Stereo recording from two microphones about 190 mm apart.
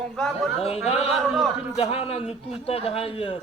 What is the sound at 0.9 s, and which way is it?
A man's voice, 30° left (ahead or behind).